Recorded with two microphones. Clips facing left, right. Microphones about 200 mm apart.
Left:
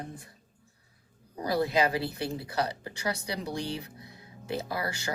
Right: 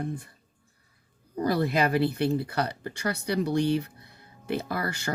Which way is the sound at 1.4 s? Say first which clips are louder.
Right 2 dB; 55° right (ahead or behind).